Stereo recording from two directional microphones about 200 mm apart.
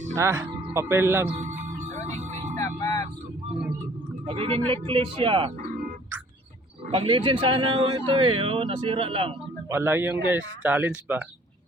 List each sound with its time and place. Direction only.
0.2 s speech: 15° right (ahead or behind)
1.4 s music: 40° right (ahead or behind)
2.6 s music: 15° left (ahead or behind)
4.3 s speech: 30° right (ahead or behind)
6.9 s speech: 25° right (ahead or behind)
9.6 s speech: 10° right (ahead or behind)